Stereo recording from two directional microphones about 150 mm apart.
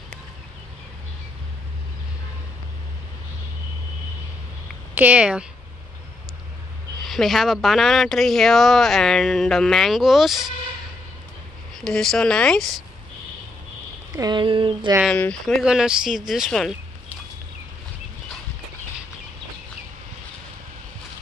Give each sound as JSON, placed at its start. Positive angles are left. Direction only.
{"t": 4.9, "sound": "speech", "side_deg": -10}
{"t": 7.0, "sound": "speech", "side_deg": 0}
{"t": 11.7, "sound": "speech", "side_deg": 5}
{"t": 14.1, "sound": "speech", "side_deg": -30}
{"t": 15.0, "sound": "speech", "side_deg": 5}